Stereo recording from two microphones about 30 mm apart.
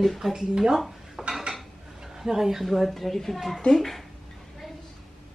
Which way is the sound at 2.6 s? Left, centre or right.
Centre.